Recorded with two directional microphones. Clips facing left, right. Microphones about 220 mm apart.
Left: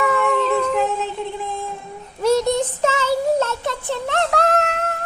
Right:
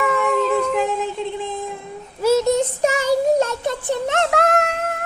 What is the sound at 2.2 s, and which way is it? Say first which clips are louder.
Child singing: right 1 dB; 5° right (ahead or behind).